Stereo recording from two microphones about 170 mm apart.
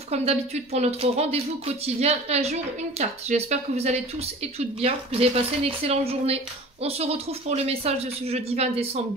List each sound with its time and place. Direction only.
0.1 s a woman's voice: 40° right (ahead or behind)